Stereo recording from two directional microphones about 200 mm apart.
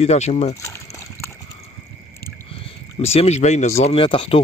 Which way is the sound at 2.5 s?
30° left (ahead or behind).